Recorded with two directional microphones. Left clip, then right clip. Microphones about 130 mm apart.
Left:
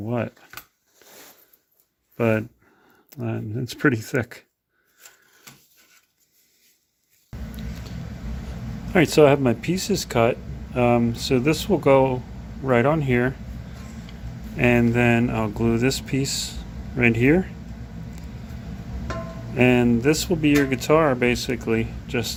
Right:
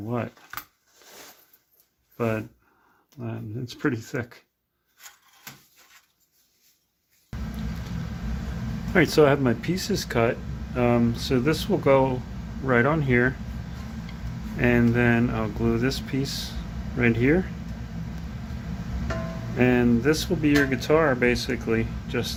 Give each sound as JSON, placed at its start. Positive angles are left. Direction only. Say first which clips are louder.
{"t": 0.0, "sound": "speech", "louder": "left 3 dB", "side_deg": 40}
{"t": 2.1, "sound": "speech", "louder": "left 5 dB", "side_deg": 60}
{"t": 8.9, "sound": "speech", "louder": "left 3 dB", "side_deg": 30}
{"t": 14.5, "sound": "speech", "louder": "left 3 dB", "side_deg": 40}
{"t": 19.5, "sound": "speech", "louder": "left 3 dB", "side_deg": 35}